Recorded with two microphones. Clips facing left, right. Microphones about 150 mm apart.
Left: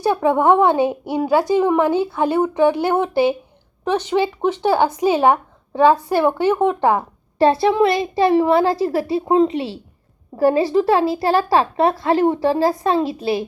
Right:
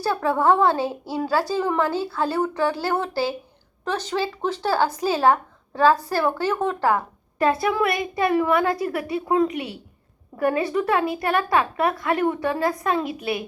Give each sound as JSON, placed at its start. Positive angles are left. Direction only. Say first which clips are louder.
{"t": 0.0, "sound": "speech", "louder": "left 5 dB", "side_deg": 20}